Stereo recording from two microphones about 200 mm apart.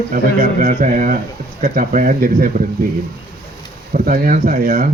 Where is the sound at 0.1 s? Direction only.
45° right (ahead or behind).